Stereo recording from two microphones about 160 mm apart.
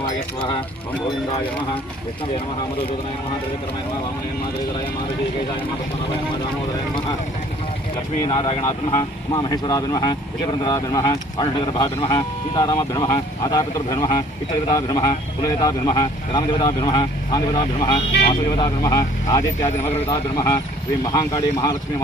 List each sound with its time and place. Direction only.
8.2 s speech: 30° left (ahead or behind)
8.6 s speech: 20° left (ahead or behind)